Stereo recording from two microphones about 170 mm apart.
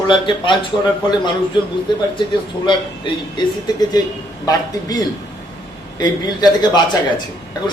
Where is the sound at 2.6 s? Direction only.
25° left (ahead or behind).